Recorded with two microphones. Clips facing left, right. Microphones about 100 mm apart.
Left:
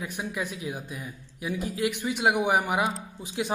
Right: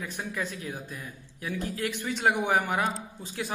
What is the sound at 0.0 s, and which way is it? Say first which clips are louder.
A man's voice: left 2 dB; 15° left (ahead or behind).